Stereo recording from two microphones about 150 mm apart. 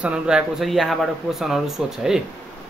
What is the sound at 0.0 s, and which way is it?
A man's voice, 5° right (ahead or behind).